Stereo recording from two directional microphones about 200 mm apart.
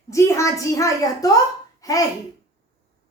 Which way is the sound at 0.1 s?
15° left (ahead or behind).